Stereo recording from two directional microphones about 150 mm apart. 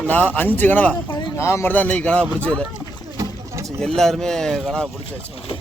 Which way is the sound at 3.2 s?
20° right (ahead or behind).